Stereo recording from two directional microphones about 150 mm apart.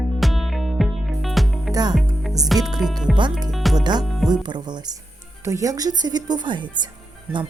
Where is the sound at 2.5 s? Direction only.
Centre (ahead or behind).